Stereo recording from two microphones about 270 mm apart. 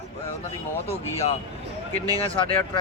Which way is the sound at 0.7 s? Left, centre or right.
Centre.